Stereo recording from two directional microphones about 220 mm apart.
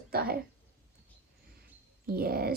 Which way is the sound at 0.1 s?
40° right (ahead or behind).